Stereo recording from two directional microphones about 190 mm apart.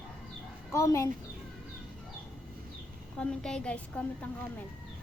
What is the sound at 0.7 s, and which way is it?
Speech, 15° left (ahead or behind).